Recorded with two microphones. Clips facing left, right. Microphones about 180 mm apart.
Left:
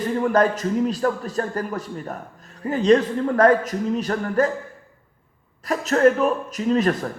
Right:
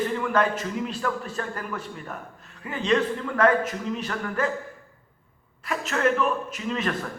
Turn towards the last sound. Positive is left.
turn(degrees=40)  # may be behind; listen again after turning